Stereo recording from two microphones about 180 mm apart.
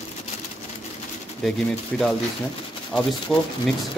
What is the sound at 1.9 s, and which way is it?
Speech, 5° left (ahead or behind).